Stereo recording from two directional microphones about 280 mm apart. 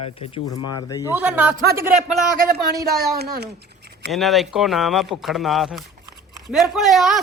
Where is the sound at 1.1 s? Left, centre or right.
Centre.